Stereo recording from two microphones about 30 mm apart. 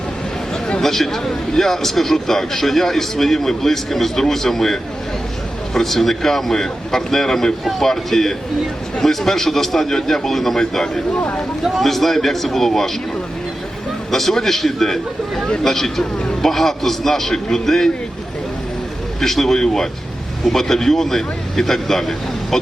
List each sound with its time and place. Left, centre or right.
0.8 s a man's voice: centre
11.2 s speech: left
11.7 s a man's voice: centre
14.1 s a man's voice: centre
19.2 s a man's voice: centre